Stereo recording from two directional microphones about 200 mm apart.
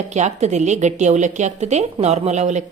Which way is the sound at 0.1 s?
35° right (ahead or behind).